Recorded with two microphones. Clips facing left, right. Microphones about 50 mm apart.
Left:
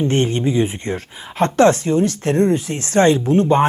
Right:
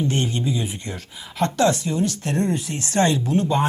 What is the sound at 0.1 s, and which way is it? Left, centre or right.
Speech, left.